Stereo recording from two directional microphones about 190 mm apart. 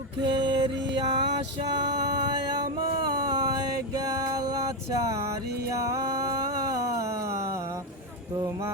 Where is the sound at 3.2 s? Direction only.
20° right (ahead or behind).